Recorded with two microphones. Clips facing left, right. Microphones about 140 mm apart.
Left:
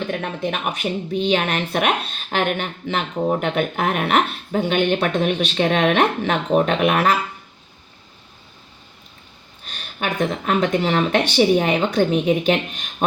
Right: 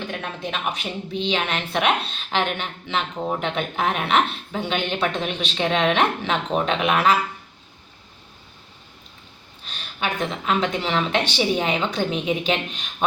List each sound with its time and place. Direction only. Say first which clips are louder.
0.1 s speech: left 5 dB; 55° left (ahead or behind)
9.6 s speech: left 2 dB; 45° left (ahead or behind)